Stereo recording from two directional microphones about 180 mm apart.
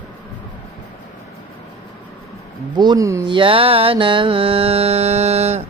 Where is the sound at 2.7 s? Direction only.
25° right (ahead or behind).